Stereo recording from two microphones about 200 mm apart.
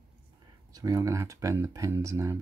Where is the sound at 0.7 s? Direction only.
20° right (ahead or behind).